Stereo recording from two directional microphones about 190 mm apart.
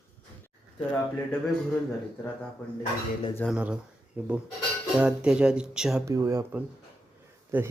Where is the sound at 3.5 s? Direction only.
5° right (ahead or behind).